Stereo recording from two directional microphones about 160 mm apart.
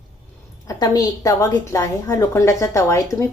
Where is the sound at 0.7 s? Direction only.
20° left (ahead or behind).